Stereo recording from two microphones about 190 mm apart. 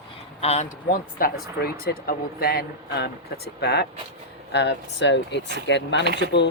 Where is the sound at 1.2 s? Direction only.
50° left (ahead or behind); by 6.5 s 65° left (ahead or behind).